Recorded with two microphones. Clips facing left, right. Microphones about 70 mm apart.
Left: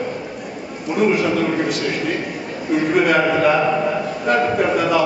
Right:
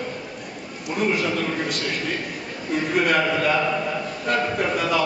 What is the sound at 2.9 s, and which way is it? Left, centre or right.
A man's voice, centre.